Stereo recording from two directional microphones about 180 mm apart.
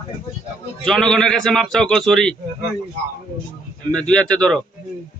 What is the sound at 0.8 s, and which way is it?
A man's voice, 5° left (ahead or behind).